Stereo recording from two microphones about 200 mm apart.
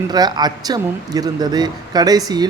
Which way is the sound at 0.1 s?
20° right (ahead or behind).